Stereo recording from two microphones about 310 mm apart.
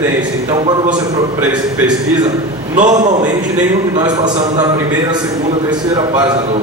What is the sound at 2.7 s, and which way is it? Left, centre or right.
Speech, right.